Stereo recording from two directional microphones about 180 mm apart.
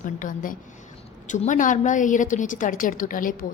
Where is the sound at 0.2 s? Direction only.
50° left (ahead or behind).